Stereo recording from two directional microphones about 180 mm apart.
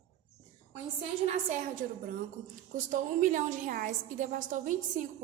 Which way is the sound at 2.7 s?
45° right (ahead or behind).